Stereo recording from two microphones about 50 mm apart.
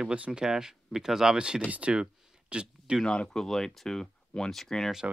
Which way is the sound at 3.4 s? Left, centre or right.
Centre.